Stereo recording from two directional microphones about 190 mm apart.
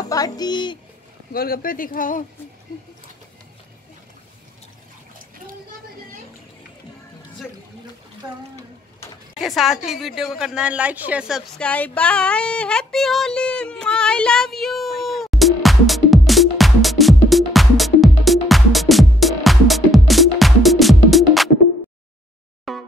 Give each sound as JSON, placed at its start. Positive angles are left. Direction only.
{"t": 0.1, "sound": "speech", "side_deg": 20}
{"t": 1.3, "sound": "speech", "side_deg": 50}
{"t": 9.4, "sound": "a woman's voice", "side_deg": 0}
{"t": 9.8, "sound": "a sound", "side_deg": 0}
{"t": 22.7, "sound": "music", "side_deg": 0}